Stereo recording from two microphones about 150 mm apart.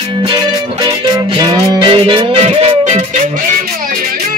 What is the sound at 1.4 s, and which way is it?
Music, 30° right (ahead or behind).